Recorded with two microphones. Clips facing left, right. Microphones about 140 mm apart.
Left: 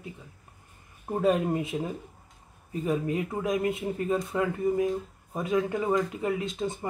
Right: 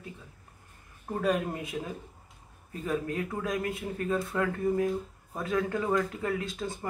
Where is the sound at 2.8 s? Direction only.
20° left (ahead or behind).